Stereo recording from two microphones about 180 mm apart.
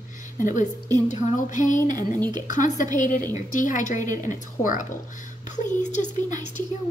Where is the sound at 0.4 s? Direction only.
45° left (ahead or behind).